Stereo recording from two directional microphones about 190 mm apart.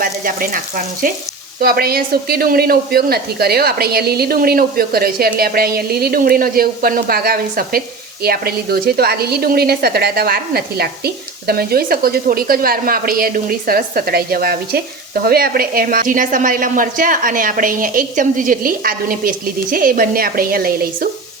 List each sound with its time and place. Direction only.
0.0 s frying: 45° right (ahead or behind)
1.0 s a woman's voice: 45° right (ahead or behind)